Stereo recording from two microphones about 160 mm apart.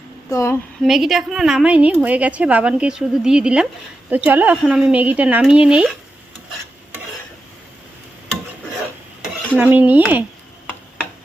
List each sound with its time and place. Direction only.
0.3 s a sound: 20° left (ahead or behind)
0.8 s a woman's voice: centre (ahead or behind)
9.6 s a woman's voice: 10° right (ahead or behind)